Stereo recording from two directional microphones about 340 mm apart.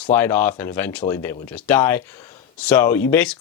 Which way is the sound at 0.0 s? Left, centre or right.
Centre.